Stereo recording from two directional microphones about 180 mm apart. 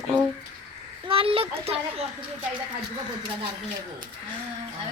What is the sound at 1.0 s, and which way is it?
Speech, 30° right (ahead or behind).